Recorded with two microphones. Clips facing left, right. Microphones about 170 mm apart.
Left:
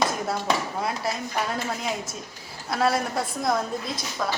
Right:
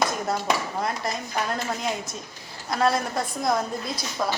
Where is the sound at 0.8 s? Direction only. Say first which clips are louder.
Even; 5° left (ahead or behind).